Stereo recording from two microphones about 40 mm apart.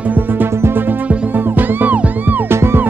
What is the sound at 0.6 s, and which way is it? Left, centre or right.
Music, right.